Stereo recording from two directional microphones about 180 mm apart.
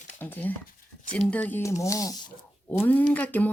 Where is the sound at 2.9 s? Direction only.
10° left (ahead or behind).